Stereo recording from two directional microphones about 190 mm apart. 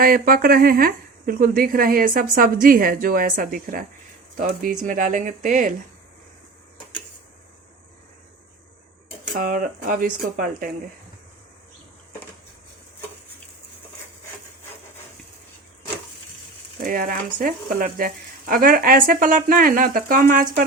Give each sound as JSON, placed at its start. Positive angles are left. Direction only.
{"t": 0.0, "sound": "speech", "side_deg": -50}
{"t": 9.4, "sound": "speech", "side_deg": -45}
{"t": 16.8, "sound": "speech", "side_deg": -50}